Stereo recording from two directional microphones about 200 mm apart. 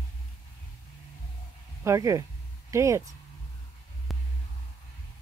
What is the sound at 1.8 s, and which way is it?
Speech, 15° right (ahead or behind).